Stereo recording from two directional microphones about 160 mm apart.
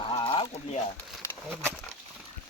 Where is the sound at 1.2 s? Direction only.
15° left (ahead or behind).